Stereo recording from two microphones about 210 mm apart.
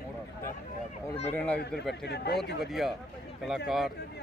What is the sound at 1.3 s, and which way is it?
Speech, 10° left (ahead or behind).